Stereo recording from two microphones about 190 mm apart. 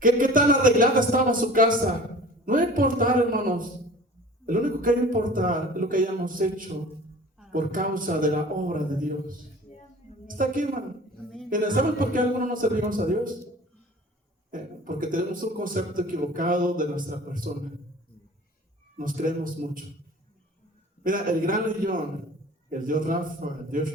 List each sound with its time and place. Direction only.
0.0 s a man's voice: 45° right (ahead or behind)
7.5 s a man's voice: 45° right (ahead or behind)
14.5 s a man's voice: 45° right (ahead or behind)
18.9 s a man's voice: 45° right (ahead or behind)
21.0 s a man's voice: 45° right (ahead or behind)